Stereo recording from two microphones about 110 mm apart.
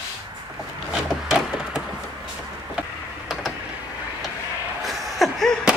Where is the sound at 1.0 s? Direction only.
5° right (ahead or behind).